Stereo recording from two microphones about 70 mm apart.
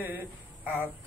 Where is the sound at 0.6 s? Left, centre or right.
Right.